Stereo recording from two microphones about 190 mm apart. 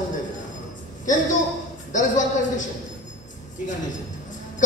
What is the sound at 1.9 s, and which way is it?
Speech, 40° left (ahead or behind).